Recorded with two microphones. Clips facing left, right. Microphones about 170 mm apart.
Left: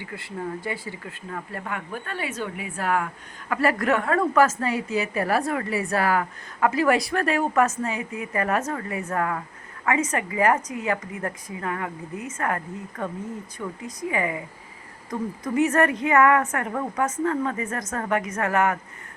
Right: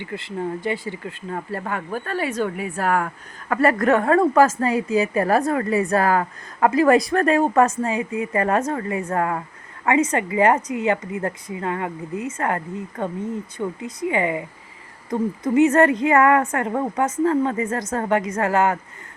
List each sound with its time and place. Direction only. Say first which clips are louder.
0.0 s a woman's voice: right 5 dB; 25° right (ahead or behind)
1.3 s a woman's voice: right 5 dB; 35° right (ahead or behind)